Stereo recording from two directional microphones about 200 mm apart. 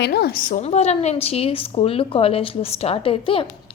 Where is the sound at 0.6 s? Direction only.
30° left (ahead or behind).